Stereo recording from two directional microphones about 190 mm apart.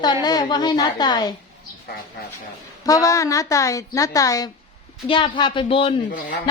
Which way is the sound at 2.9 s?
15° left (ahead or behind).